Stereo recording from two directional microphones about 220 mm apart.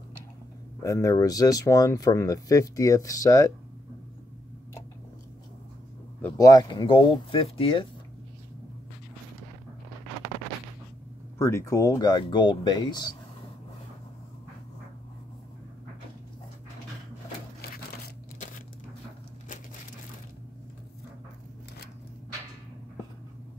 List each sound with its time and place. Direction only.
0.8 s speech: 15° left (ahead or behind)
6.2 s speech: 15° left (ahead or behind)
11.3 s speech: 10° left (ahead or behind)
17.6 s crumpling: 45° left (ahead or behind)